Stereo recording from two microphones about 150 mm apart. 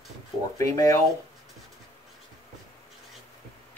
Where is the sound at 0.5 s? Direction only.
25° left (ahead or behind).